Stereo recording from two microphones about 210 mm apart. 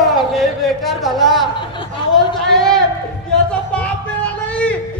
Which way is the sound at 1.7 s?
25° left (ahead or behind).